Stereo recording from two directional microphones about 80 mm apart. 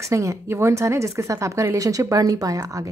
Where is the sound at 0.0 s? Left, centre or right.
Right.